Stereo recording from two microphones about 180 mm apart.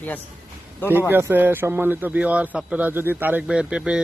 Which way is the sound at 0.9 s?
10° right (ahead or behind).